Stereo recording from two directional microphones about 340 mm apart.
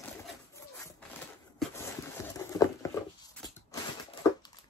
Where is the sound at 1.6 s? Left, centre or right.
Centre.